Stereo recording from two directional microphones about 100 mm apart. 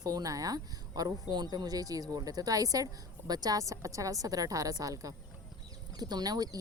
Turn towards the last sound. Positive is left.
turn(degrees=-40)  # may be behind; listen again after turning